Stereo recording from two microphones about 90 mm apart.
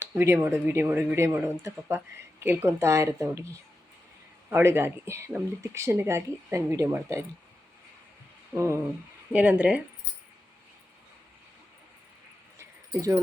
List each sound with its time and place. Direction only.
0.0 s speech: 25° right (ahead or behind)
4.4 s speech: 25° right (ahead or behind)
8.5 s speech: 30° right (ahead or behind)
9.3 s speech: 15° right (ahead or behind)